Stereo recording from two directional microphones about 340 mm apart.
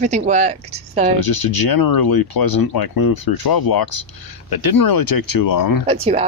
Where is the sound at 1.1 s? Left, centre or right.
Left.